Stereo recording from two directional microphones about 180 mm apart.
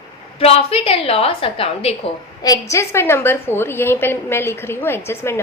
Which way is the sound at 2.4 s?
20° left (ahead or behind).